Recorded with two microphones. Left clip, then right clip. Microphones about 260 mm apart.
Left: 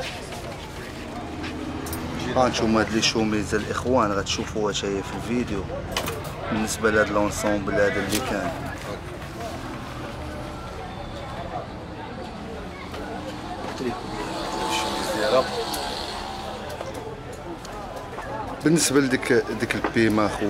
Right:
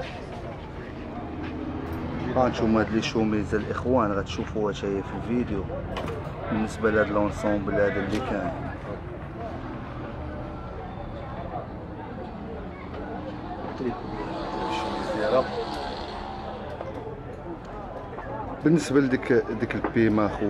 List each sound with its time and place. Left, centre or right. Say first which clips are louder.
2.1 s speech: left 3 dB; centre
3.9 s speech: left 3 dB; centre
13.7 s vehicle: left 1 dB; centre
15.2 s a sound: left 2 dB; centre
18.6 s speech: left 2 dB; centre